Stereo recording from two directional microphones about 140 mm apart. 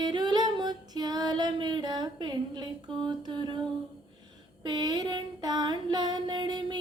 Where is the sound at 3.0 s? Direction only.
30° right (ahead or behind).